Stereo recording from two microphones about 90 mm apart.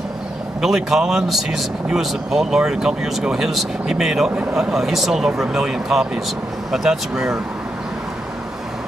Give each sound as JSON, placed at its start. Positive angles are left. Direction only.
{"t": 0.6, "sound": "speech", "side_deg": -5}